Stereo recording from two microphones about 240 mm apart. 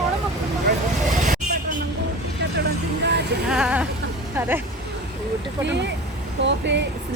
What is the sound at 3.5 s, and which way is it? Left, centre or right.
Speech, centre.